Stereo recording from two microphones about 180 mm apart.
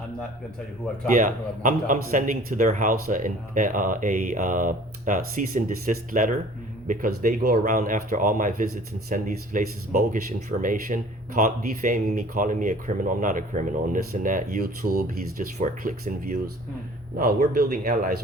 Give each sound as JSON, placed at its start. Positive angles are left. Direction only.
{"t": 1.1, "sound": "speech", "side_deg": -45}